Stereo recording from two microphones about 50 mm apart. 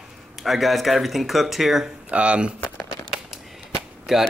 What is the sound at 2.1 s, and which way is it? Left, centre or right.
Speech, right.